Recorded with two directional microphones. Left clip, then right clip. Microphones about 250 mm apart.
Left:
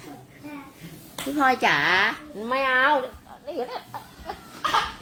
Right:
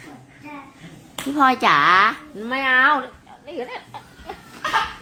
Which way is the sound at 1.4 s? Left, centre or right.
Right.